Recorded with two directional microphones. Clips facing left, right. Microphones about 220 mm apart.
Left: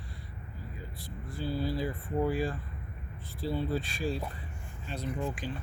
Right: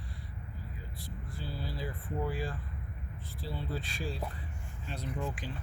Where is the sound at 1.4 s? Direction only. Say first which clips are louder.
Left 10 dB; 10° left (ahead or behind).